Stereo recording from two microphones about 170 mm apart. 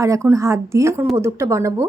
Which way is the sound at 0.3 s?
15° right (ahead or behind).